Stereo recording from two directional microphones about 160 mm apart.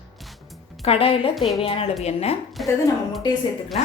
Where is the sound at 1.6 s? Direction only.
35° left (ahead or behind).